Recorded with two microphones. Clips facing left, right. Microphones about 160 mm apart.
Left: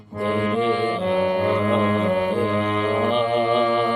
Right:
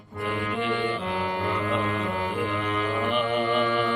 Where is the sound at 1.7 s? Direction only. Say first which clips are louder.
Left 7 dB; 40° left (ahead or behind).